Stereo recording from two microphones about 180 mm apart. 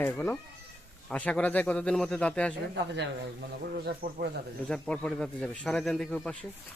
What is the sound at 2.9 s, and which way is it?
Speech, 65° right (ahead or behind).